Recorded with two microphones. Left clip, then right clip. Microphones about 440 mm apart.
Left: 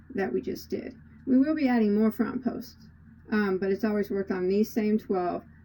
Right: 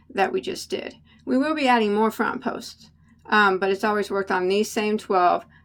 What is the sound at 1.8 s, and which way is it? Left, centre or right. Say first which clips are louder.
Speech: right 5 dB; right.